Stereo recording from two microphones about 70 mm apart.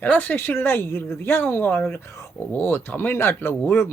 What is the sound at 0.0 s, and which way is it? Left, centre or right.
Speech, left.